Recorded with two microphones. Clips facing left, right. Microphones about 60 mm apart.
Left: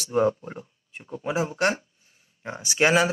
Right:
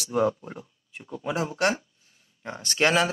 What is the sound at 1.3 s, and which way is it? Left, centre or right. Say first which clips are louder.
A man's voice: left 1 dB; centre.